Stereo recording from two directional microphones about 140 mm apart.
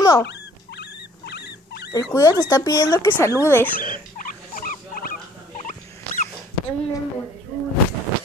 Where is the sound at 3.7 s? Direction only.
80° left.